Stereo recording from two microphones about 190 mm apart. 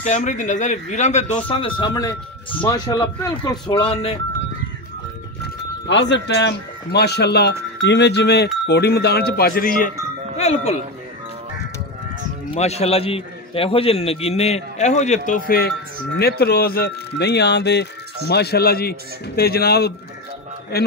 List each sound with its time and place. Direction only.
0.0 s a man's voice: 40° left (ahead or behind)
5.9 s speech: 65° left (ahead or behind); by 10.8 s 35° left (ahead or behind)
12.4 s a man's voice: 35° left (ahead or behind); by 20.9 s 55° left (ahead or behind)